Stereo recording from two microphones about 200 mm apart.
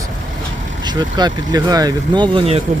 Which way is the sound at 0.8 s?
20° right (ahead or behind).